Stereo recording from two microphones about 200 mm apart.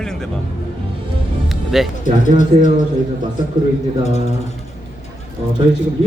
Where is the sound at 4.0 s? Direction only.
35° left (ahead or behind).